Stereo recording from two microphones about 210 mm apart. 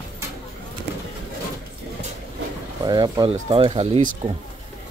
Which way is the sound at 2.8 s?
20° right (ahead or behind).